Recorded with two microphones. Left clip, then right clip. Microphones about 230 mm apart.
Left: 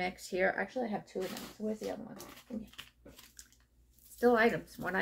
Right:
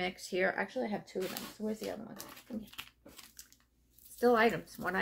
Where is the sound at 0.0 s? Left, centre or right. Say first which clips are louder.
Left 1 dB; centre.